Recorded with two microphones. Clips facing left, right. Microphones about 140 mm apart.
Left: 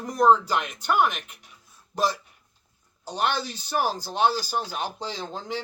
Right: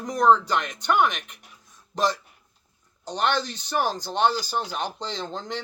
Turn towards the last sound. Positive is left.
turn(degrees=10)  # may be behind; listen again after turning